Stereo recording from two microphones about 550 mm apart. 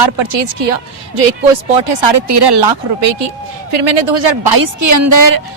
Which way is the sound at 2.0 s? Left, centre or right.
Right.